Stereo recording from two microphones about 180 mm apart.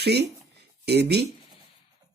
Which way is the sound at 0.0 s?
65° right (ahead or behind).